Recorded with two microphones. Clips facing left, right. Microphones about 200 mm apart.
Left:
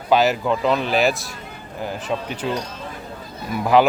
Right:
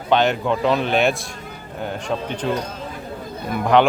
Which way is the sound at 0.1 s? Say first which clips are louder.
Left 1 dB; 5° left (ahead or behind).